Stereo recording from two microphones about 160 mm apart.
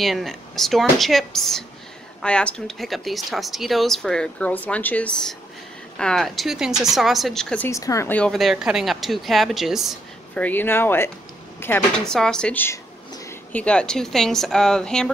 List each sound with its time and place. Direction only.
0.0 s speech: centre (ahead or behind)
7.7 s speech: 20° left (ahead or behind); by 10.4 s centre (ahead or behind)
10.4 s speech: 10° left (ahead or behind)
12.0 s speech: 5° left (ahead or behind)